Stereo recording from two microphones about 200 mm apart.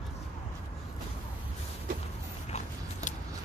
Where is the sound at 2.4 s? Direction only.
35° left (ahead or behind).